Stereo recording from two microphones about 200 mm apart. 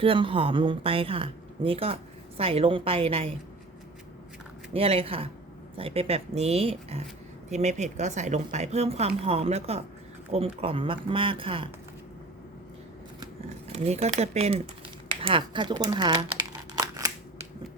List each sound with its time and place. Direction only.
0.0 s a woman's voice: 25° right (ahead or behind)
4.7 s a woman's voice: 30° right (ahead or behind)
13.7 s a woman's voice: 30° right (ahead or behind)
16.7 s camera: 20° right (ahead or behind)